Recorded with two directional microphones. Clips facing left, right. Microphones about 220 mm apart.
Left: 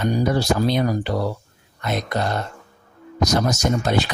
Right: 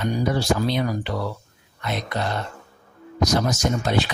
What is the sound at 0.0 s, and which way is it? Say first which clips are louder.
Speech: left 3 dB; 40° left (ahead or behind).